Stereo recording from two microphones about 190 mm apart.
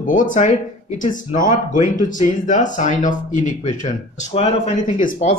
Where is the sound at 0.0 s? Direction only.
40° left (ahead or behind).